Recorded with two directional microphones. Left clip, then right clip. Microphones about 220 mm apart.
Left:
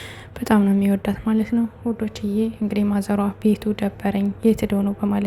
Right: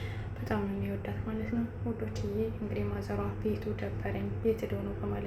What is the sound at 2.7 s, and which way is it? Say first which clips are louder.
A woman's voice: left 15 dB; 45° left (ahead or behind).